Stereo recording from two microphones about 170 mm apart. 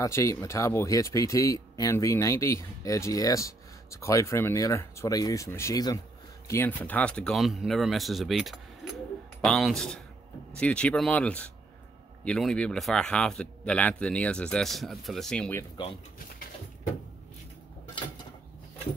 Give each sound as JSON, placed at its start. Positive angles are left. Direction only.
{"t": 0.0, "sound": "a man's voice", "side_deg": 20}
{"t": 8.8, "sound": "a sound", "side_deg": 0}
{"t": 9.4, "sound": "a man's voice", "side_deg": 0}